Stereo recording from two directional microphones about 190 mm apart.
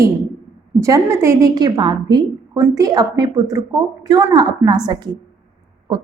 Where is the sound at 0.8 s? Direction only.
15° right (ahead or behind).